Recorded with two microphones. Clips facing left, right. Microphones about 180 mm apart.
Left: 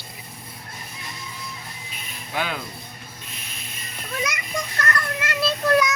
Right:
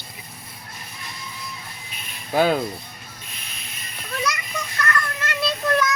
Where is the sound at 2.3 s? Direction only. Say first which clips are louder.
Right 9 dB; 40° right (ahead or behind).